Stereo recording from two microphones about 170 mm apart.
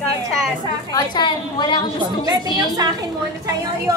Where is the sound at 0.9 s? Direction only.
25° left (ahead or behind).